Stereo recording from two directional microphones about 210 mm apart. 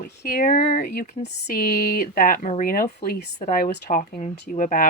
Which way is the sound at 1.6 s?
45° left (ahead or behind).